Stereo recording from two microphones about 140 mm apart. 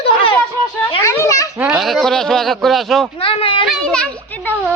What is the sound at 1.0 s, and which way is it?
Children playing, 20° left (ahead or behind).